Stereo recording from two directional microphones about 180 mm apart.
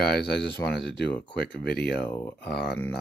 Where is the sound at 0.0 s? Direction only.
60° left (ahead or behind).